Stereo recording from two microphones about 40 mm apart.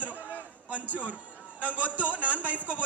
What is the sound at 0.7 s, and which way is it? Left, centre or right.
A man's voice, right.